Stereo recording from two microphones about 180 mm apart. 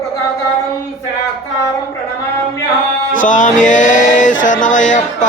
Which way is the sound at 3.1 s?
45° left (ahead or behind).